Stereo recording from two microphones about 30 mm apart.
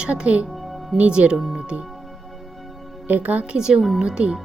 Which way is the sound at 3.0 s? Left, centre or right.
Right.